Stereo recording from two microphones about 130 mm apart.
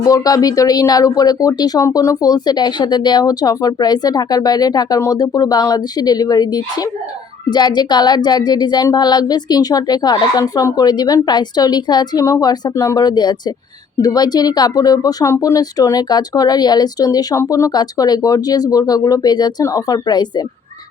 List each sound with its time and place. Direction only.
0.0 s speech: 25° left (ahead or behind)